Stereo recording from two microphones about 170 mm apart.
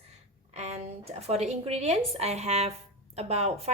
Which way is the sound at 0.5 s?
40° right (ahead or behind).